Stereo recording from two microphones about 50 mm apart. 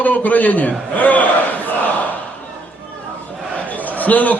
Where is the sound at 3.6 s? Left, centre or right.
Left.